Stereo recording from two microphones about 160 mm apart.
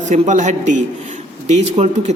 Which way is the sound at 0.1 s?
50° right (ahead or behind).